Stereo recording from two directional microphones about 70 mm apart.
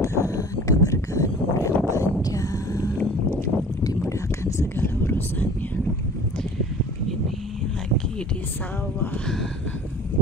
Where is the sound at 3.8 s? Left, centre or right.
Left.